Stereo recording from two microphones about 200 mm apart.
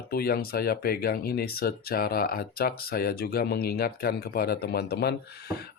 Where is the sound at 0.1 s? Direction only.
50° left (ahead or behind).